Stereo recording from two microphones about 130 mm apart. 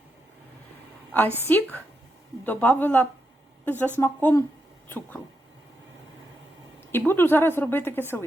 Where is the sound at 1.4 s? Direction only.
15° left (ahead or behind).